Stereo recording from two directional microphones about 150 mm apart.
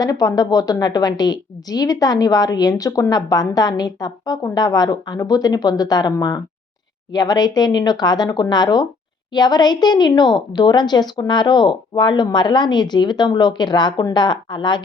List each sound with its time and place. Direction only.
0.0 s a woman's voice: 25° left (ahead or behind)